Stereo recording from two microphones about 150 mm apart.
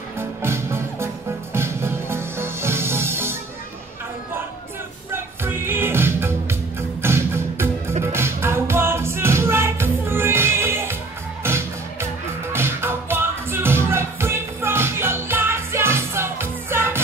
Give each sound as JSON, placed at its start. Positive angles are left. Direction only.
{"t": 0.2, "sound": "music", "side_deg": -15}
{"t": 5.1, "sound": "music", "side_deg": -15}